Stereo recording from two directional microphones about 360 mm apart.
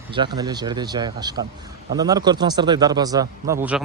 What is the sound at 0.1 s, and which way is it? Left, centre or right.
A man's voice, centre.